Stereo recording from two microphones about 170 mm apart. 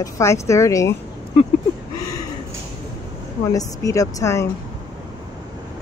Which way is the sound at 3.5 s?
20° left (ahead or behind).